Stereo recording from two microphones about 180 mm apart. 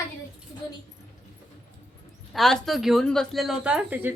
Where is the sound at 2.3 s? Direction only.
Centre (ahead or behind).